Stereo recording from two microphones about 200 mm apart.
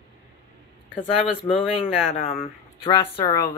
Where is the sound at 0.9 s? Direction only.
25° left (ahead or behind).